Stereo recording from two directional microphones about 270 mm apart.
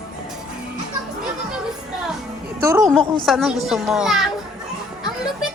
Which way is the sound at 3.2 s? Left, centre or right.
Centre.